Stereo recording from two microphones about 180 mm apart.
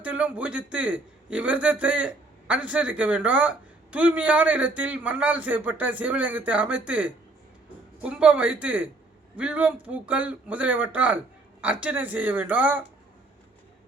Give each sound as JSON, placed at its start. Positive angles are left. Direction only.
{"t": 0.0, "sound": "a man's voice", "side_deg": -10}